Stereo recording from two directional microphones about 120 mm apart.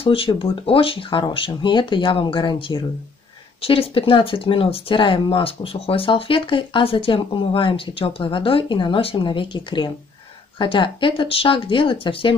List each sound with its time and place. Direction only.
0.0 s speech: 50° left (ahead or behind)